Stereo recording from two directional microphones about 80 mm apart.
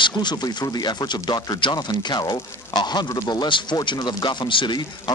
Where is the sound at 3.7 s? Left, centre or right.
Left.